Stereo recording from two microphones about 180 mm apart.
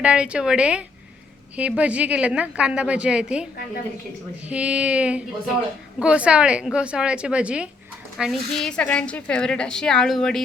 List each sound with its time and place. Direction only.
0.0 s a woman's voice: 5° right (ahead or behind)
4.4 s a woman's voice: 5° right (ahead or behind)